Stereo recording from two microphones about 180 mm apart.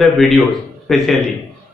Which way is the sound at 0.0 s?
Centre (ahead or behind).